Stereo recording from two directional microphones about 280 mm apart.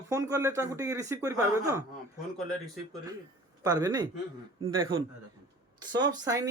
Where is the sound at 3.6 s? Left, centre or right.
Centre.